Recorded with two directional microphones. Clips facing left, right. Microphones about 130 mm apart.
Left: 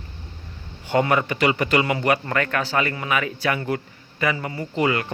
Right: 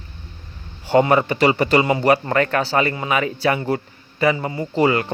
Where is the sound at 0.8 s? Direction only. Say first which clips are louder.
Right 5 dB; 30° right (ahead or behind).